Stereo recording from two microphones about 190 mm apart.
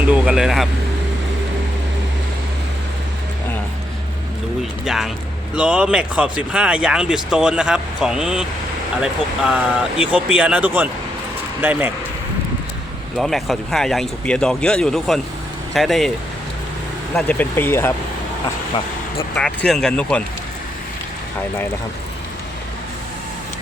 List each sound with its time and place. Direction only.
0.1 s speech: 5° right (ahead or behind)
4.9 s speech: centre (ahead or behind)
13.1 s speech: centre (ahead or behind)
17.2 s speech: 10° left (ahead or behind)
19.4 s speech: 5° left (ahead or behind)